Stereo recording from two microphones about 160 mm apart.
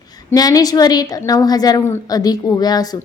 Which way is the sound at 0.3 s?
20° left (ahead or behind).